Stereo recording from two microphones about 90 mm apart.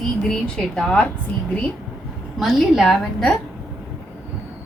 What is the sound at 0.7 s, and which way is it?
Speech, 5° left (ahead or behind).